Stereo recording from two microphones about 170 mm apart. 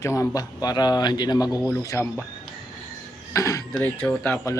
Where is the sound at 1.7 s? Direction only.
20° left (ahead or behind).